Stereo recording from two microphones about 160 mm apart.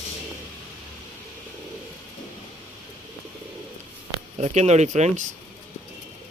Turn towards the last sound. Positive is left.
turn(degrees=-45)  # may be behind; listen again after turning